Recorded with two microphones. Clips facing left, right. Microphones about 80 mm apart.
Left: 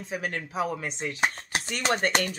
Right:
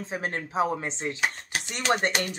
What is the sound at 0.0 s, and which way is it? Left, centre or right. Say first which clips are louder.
Speech: right 1 dB; right.